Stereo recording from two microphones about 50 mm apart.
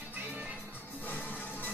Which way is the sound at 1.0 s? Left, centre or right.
Left.